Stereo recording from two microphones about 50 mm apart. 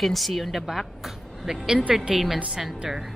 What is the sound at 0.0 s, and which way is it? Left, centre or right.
Speech, centre.